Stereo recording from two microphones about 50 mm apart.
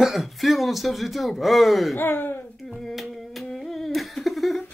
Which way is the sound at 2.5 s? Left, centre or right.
Centre.